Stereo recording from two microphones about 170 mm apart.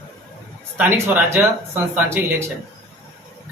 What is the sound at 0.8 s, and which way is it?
Speech, 15° right (ahead or behind).